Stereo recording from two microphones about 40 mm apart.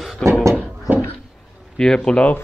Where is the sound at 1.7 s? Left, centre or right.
Left.